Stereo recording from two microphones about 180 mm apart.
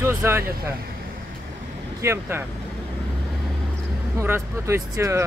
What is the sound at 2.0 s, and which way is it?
Speech, 15° right (ahead or behind).